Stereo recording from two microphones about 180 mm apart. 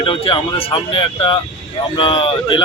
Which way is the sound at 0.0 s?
30° left (ahead or behind).